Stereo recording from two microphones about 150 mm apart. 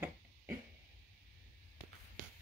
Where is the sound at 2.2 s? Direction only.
60° right (ahead or behind).